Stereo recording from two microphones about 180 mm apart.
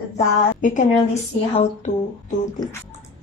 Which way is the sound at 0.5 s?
45° left (ahead or behind).